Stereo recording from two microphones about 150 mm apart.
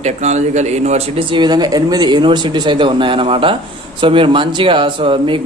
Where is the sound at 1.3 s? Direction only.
30° right (ahead or behind).